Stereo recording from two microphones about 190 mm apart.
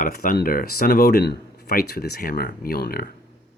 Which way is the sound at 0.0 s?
50° left (ahead or behind).